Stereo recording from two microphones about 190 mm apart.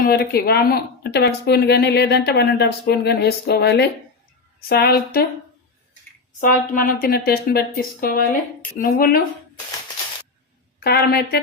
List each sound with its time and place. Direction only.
0.0 s a woman's voice: 55° left (ahead or behind)
6.7 s speech: 50° left (ahead or behind)
10.8 s a woman's voice: 55° left (ahead or behind)